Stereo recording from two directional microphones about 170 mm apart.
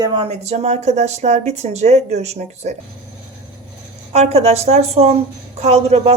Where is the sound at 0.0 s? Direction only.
35° right (ahead or behind).